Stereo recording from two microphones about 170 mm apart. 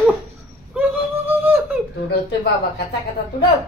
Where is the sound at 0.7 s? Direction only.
10° right (ahead or behind).